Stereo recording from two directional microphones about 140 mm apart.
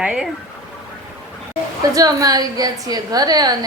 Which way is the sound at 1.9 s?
25° right (ahead or behind).